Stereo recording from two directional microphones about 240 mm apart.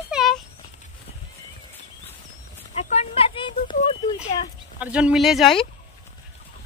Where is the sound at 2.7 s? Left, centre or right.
Left.